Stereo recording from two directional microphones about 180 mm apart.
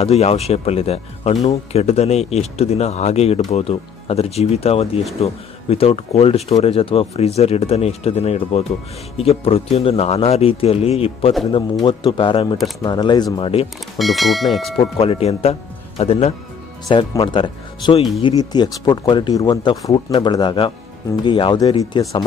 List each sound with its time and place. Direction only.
0.0 s speech: 35° left (ahead or behind)
13.9 s speech: centre (ahead or behind)
14.8 s speech: 30° left (ahead or behind)
16.8 s speech: 25° left (ahead or behind)